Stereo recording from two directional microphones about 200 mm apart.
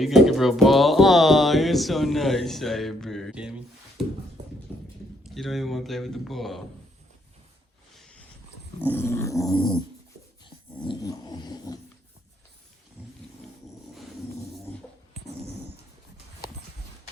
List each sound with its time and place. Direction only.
0.0 s speech: centre (ahead or behind)
4.0 s a sound: centre (ahead or behind)
5.2 s speech: centre (ahead or behind)
8.9 s dog: 10° left (ahead or behind)